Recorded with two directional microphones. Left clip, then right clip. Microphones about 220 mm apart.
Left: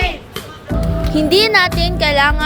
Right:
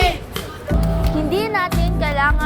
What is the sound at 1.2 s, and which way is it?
Speech, 45° left (ahead or behind).